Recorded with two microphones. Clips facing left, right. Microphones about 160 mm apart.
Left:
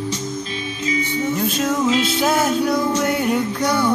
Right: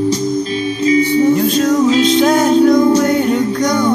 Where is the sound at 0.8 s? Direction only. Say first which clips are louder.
Right 11 dB; 35° right (ahead or behind).